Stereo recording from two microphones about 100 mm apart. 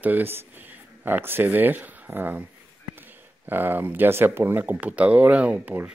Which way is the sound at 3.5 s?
20° right (ahead or behind).